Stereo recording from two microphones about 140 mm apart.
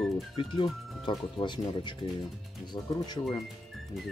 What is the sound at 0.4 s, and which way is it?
Speech, 35° left (ahead or behind).